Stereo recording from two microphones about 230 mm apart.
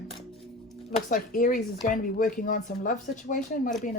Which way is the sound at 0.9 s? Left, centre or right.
Left.